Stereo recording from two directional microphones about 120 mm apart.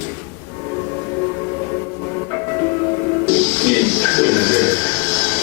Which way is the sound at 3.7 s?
15° left (ahead or behind).